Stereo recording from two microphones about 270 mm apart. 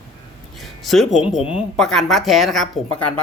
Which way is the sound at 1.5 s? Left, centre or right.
Centre.